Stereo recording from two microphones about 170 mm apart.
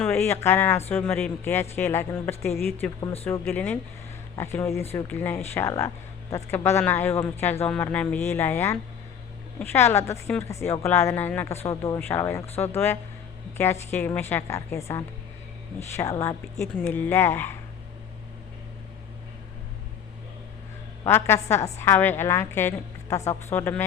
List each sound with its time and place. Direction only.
0.1 s a woman's voice: 15° left (ahead or behind)
21.0 s a woman's voice: 15° left (ahead or behind)